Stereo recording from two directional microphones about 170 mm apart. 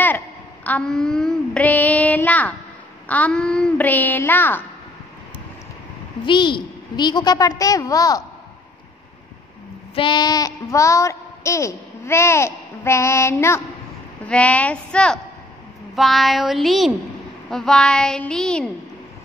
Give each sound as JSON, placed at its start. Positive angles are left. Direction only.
{"t": 0.7, "sound": "speech", "side_deg": 5}
{"t": 6.2, "sound": "a woman's voice", "side_deg": 30}
{"t": 9.9, "sound": "a woman's voice", "side_deg": 30}